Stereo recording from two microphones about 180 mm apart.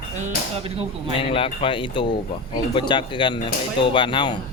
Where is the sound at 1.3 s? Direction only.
30° left (ahead or behind).